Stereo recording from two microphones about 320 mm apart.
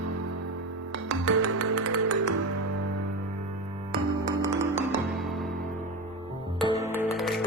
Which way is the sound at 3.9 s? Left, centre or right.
Centre.